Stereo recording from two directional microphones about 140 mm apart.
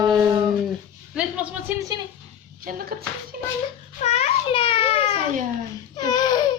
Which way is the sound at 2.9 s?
90° right.